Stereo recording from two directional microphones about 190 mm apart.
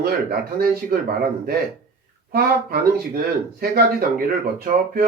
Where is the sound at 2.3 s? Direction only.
55° right (ahead or behind).